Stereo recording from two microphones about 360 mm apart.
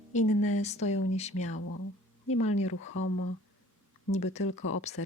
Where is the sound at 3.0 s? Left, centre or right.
Left.